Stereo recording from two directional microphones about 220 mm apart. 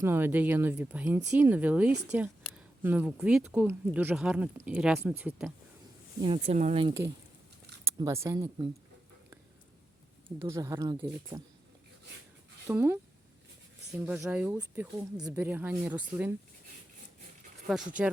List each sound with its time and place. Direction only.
0.0 s speech: 10° right (ahead or behind)
6.2 s speech: 30° right (ahead or behind)
7.9 s speech: 15° right (ahead or behind)
10.4 s speech: 15° right (ahead or behind)
12.6 s speech: 10° right (ahead or behind)
14.2 s speech: 5° right (ahead or behind)
17.7 s speech: 5° right (ahead or behind)